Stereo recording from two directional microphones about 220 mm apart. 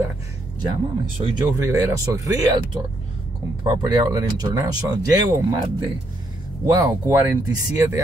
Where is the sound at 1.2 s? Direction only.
20° right (ahead or behind).